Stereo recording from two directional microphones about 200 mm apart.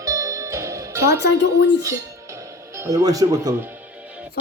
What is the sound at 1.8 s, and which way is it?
Music, 15° right (ahead or behind).